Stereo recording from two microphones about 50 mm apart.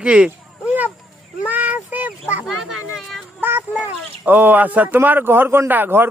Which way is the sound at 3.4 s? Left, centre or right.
Right.